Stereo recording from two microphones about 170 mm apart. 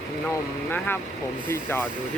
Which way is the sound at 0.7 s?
10° left (ahead or behind).